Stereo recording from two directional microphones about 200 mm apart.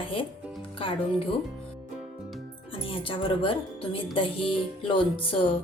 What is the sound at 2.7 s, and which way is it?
A woman's voice, 25° left (ahead or behind).